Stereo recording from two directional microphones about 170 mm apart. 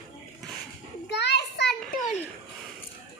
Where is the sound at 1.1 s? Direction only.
80° left.